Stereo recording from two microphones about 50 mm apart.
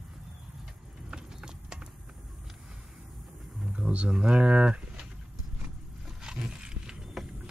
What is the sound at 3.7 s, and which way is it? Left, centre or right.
Speech, right.